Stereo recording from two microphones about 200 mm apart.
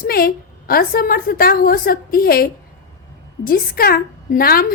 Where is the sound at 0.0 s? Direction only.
45° left (ahead or behind).